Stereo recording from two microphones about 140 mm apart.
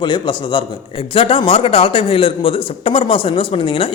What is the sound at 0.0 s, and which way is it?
A man's voice, 35° left (ahead or behind).